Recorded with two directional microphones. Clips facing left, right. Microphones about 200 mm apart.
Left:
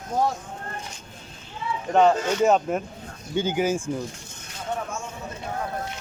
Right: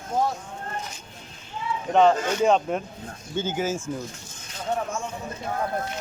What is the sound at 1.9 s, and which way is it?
Speech, 5° left (ahead or behind).